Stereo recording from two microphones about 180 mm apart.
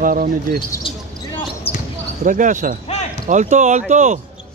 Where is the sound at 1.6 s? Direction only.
30° left (ahead or behind).